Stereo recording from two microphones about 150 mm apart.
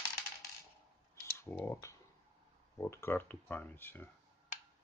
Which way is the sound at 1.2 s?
20° left (ahead or behind).